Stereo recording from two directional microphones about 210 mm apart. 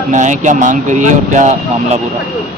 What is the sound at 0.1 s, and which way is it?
Speech, 35° right (ahead or behind).